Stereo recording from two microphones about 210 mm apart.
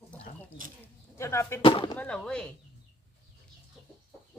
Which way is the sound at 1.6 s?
25° left (ahead or behind).